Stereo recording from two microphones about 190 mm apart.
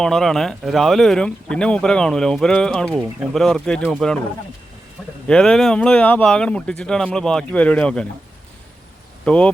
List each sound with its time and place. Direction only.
0.0 s speech: centre (ahead or behind)
5.0 s a sound: centre (ahead or behind)
5.3 s speech: 5° left (ahead or behind)
9.2 s speech: 5° left (ahead or behind)